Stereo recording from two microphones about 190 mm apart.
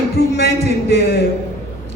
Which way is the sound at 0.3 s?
60° left (ahead or behind).